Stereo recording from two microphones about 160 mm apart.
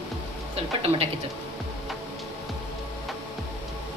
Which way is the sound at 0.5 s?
35° right (ahead or behind).